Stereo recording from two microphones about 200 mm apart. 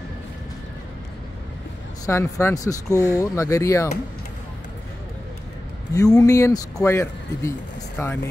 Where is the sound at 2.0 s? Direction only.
15° left (ahead or behind).